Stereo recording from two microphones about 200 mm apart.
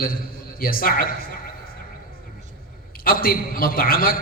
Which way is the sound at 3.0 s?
45° left (ahead or behind).